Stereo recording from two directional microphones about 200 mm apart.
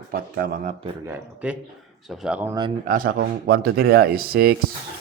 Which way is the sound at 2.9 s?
45° right (ahead or behind).